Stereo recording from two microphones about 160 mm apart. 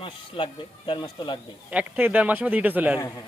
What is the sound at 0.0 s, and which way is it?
Speech, 30° left (ahead or behind).